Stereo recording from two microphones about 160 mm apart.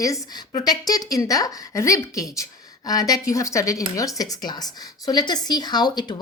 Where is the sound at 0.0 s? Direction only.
20° left (ahead or behind).